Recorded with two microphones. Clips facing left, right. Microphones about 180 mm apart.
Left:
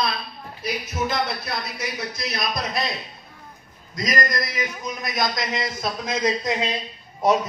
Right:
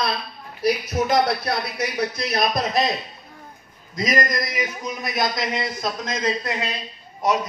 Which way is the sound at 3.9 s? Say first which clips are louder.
Right 2 dB; 25° right (ahead or behind).